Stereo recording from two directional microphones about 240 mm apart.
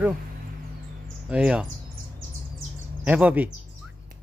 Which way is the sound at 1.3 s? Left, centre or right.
Centre.